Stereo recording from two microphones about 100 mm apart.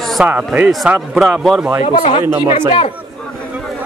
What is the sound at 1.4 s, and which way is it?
Speech, centre (ahead or behind).